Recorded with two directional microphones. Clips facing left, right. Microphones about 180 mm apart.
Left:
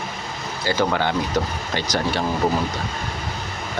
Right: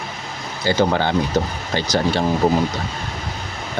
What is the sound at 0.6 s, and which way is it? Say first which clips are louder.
Speech: right 3 dB; 30° right (ahead or behind).